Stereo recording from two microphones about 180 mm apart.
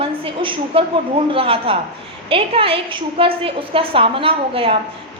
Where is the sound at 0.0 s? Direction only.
30° right (ahead or behind).